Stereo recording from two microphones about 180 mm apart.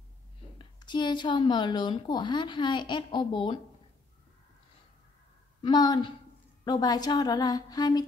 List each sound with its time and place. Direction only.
0.7 s a woman's voice: 25° left (ahead or behind)
5.6 s a woman's voice: 25° left (ahead or behind)